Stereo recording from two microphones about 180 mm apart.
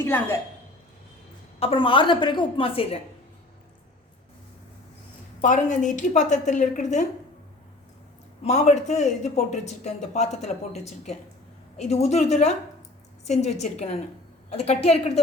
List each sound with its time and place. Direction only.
0.0 s a woman's voice: 15° left (ahead or behind)
1.5 s a woman's voice: 30° left (ahead or behind)
5.4 s a woman's voice: 45° left (ahead or behind)
8.4 s speech: 40° left (ahead or behind)